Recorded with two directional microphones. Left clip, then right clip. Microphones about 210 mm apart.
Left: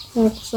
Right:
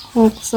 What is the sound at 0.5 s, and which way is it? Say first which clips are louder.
Speech: right 8 dB; 25° right (ahead or behind).